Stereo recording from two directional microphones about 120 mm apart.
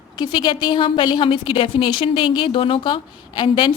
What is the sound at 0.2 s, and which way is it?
A woman's voice, 40° left (ahead or behind).